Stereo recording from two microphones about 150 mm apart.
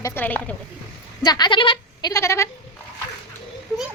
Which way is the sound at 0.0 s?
15° left (ahead or behind).